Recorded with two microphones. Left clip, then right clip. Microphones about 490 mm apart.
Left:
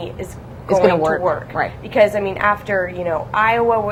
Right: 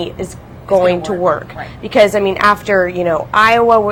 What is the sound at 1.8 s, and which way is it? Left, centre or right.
A woman's voice, right.